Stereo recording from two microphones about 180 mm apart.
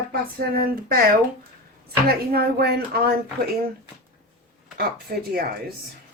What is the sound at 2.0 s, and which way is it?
Speech, 60° right (ahead or behind).